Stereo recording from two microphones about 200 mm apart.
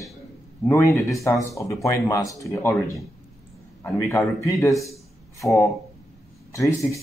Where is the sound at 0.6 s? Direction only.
15° left (ahead or behind).